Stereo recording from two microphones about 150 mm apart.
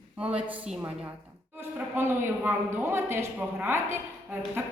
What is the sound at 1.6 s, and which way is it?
Speech, 15° right (ahead or behind).